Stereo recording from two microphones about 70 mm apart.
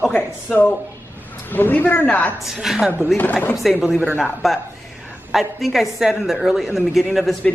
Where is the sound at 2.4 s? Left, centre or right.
Centre.